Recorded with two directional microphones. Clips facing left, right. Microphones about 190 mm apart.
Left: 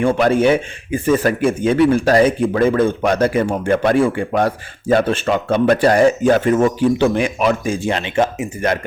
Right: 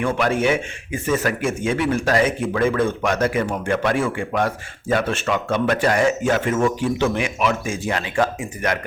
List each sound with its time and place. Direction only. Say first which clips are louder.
0.0 s speech: left 6 dB; 35° left (ahead or behind)